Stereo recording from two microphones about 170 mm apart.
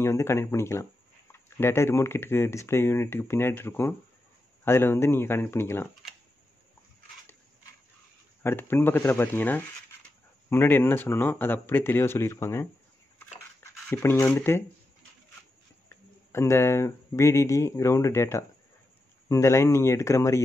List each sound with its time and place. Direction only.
0.0 s speech: 15° left (ahead or behind)
8.4 s speech: 10° left (ahead or behind)
13.8 s speech: 15° left (ahead or behind)
15.9 s speech: 15° left (ahead or behind)